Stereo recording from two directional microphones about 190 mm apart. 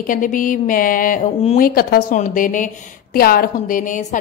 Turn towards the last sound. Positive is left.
turn(degrees=45)  # may be behind; listen again after turning